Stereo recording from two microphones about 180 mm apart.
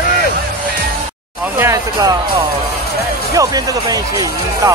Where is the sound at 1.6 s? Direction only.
15° right (ahead or behind).